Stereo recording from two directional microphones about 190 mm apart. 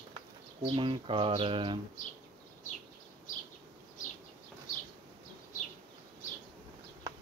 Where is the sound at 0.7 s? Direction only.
25° right (ahead or behind).